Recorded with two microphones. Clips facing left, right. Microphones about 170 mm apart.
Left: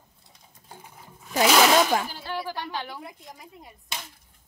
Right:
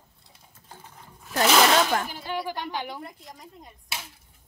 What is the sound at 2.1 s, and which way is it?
Speech, 15° right (ahead or behind).